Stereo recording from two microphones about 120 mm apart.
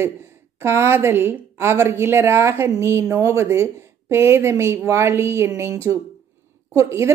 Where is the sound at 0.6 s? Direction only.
20° right (ahead or behind).